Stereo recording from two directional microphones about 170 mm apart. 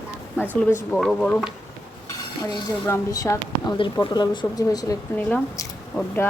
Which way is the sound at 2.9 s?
15° left (ahead or behind).